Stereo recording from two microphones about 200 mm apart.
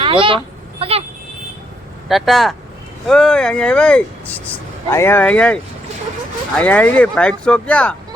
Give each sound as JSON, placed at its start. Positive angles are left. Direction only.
{"t": 0.0, "sound": "vehicle", "side_deg": -25}
{"t": 2.0, "sound": "speech", "side_deg": 0}
{"t": 6.6, "sound": "speech", "side_deg": 5}